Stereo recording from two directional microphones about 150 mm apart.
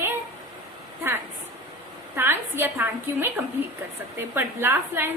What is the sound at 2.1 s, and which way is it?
A woman's voice, 15° right (ahead or behind).